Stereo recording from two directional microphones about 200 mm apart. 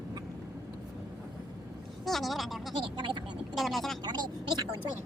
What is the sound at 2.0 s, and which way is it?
Speech, centre (ahead or behind).